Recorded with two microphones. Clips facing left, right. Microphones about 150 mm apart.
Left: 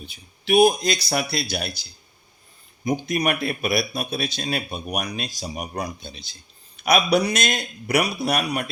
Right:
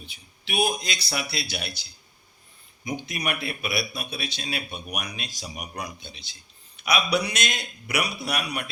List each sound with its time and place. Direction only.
0.0 s speech: 45° left (ahead or behind)